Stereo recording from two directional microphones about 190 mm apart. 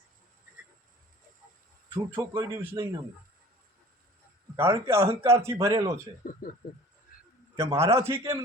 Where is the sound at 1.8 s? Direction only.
10° right (ahead or behind).